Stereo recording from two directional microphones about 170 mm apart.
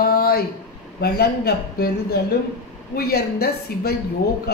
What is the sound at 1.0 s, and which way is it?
A woman's voice, 70° left (ahead or behind).